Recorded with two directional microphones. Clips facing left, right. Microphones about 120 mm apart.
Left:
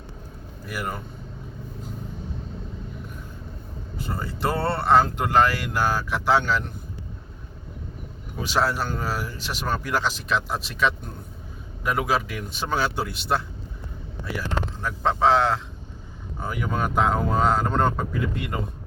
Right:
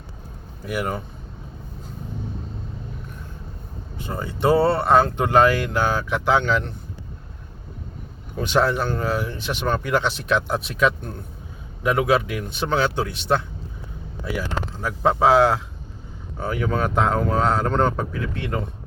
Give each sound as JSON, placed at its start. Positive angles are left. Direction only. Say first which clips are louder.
{"t": 0.6, "sound": "speech", "louder": "right 5 dB", "side_deg": 0}
{"t": 4.1, "sound": "speech", "louder": "right 8 dB", "side_deg": 0}
{"t": 8.4, "sound": "speech", "louder": "right 4 dB", "side_deg": 5}
{"t": 14.8, "sound": "speech", "louder": "right 4 dB", "side_deg": -10}
{"t": 16.5, "sound": "speech", "louder": "right 4 dB", "side_deg": 5}